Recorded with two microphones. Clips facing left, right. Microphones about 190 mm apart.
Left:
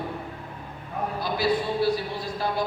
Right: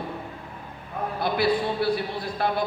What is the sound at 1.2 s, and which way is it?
A man's voice, 60° right (ahead or behind).